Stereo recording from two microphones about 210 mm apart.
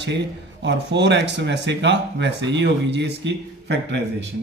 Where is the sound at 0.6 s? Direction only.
55° right (ahead or behind).